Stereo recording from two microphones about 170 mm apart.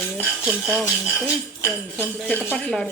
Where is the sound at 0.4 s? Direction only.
Centre (ahead or behind).